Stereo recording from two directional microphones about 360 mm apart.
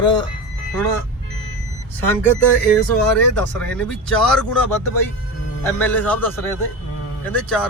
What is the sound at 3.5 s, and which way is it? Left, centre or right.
Speech, centre.